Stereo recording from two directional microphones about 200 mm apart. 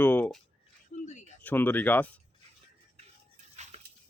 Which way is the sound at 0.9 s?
35° left (ahead or behind).